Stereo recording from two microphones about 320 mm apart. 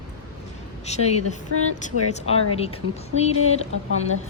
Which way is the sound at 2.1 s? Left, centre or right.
Centre.